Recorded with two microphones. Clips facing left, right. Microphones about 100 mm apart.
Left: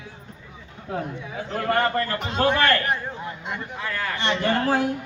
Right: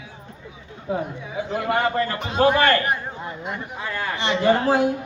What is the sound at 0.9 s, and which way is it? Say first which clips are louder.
A man's voice: right 3 dB; 10° right (ahead or behind).